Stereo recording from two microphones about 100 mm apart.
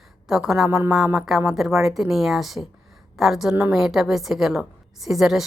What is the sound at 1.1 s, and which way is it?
Speech, 5° right (ahead or behind).